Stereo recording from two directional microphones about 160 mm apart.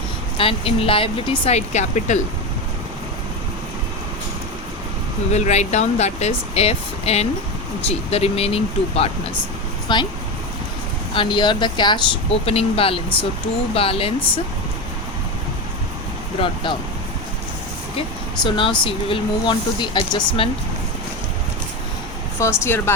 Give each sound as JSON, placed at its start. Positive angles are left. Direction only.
{"t": 0.3, "sound": "speech", "side_deg": 35}
{"t": 5.3, "sound": "speech", "side_deg": 45}
{"t": 11.1, "sound": "speech", "side_deg": 30}
{"t": 18.4, "sound": "speech", "side_deg": 30}
{"t": 22.4, "sound": "speech", "side_deg": 15}